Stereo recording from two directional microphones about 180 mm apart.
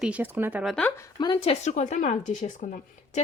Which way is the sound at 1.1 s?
25° left (ahead or behind).